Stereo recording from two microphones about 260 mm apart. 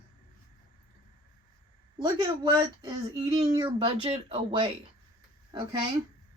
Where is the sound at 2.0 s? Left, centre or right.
Centre.